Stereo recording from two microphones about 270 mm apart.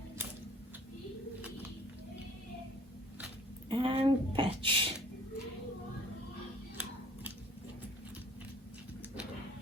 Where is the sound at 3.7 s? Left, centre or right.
Centre.